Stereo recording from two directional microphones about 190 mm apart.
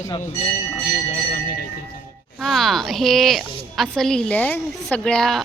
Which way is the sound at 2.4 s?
Centre (ahead or behind).